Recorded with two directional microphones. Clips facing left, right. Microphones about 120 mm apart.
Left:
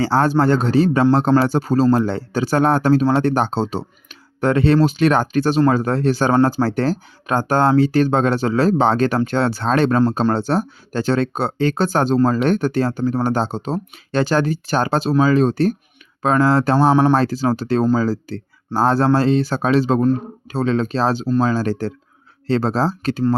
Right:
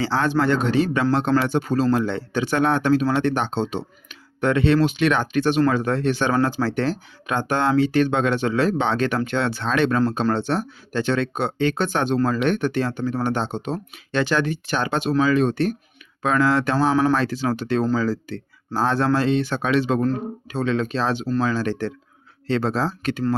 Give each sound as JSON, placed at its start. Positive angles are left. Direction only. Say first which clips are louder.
{"t": 0.0, "sound": "speech", "louder": "left 4 dB", "side_deg": 40}